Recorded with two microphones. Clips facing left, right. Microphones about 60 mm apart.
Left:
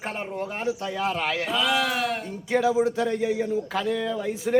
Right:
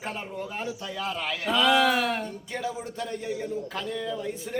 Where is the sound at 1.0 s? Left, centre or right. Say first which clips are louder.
Left 3 dB; left.